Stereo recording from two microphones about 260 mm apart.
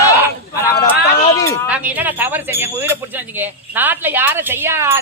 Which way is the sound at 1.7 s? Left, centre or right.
Centre.